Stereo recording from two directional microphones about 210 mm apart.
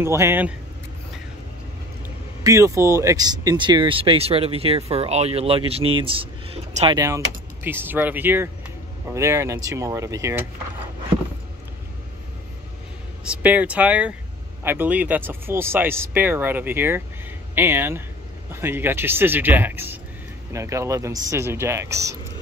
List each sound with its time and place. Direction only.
0.0 s speech: 10° right (ahead or behind)
2.4 s speech: 15° right (ahead or behind)
7.6 s speech: 10° right (ahead or behind)
13.2 s speech: 5° right (ahead or behind)